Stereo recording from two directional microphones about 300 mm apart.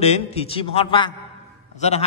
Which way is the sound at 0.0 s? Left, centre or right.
Left.